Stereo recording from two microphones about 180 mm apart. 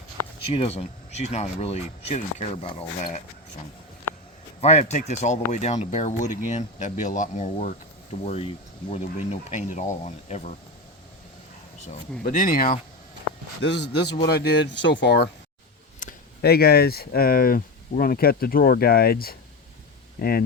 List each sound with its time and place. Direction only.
0.4 s speech: 30° left (ahead or behind)
4.6 s speech: 40° left (ahead or behind)
12.2 s speech: 50° left (ahead or behind)
13.6 s speech: 70° left (ahead or behind)
16.0 s speech: 55° left (ahead or behind)